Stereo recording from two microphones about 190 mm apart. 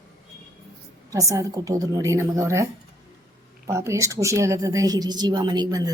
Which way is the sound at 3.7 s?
15° right (ahead or behind).